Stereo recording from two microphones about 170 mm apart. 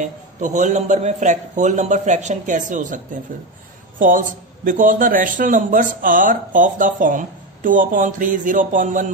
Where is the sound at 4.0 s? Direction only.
50° right (ahead or behind).